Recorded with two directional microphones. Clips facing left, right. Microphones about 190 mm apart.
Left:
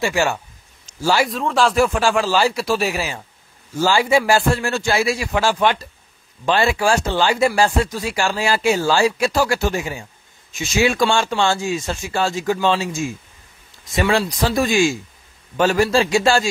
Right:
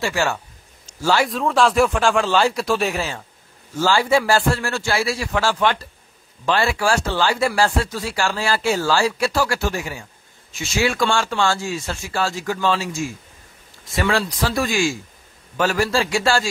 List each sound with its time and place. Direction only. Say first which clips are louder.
0.0 s speech: left 2 dB; 15° left (ahead or behind)